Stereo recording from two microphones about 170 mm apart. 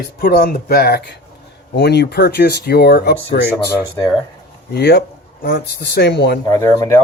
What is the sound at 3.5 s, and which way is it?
Speech, 15° left (ahead or behind).